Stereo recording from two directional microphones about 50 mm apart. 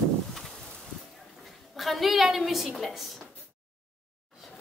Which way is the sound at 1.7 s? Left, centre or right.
Centre.